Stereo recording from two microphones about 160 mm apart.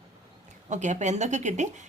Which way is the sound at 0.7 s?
50° right (ahead or behind).